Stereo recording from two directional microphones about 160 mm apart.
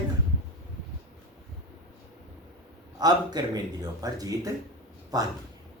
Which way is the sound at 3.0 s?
25° right (ahead or behind).